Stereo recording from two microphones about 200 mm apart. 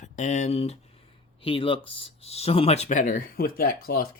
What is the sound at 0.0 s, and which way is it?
Speech, 35° left (ahead or behind).